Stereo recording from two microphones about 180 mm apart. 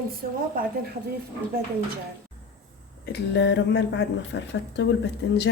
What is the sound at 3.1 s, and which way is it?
Speech, 75° left (ahead or behind).